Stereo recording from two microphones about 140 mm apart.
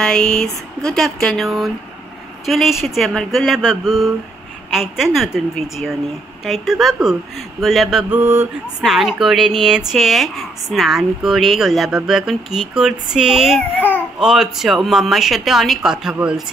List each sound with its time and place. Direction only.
0.0 s a woman's voice: 5° left (ahead or behind)
8.1 s a sound: 15° right (ahead or behind)
8.8 s a woman's voice: centre (ahead or behind)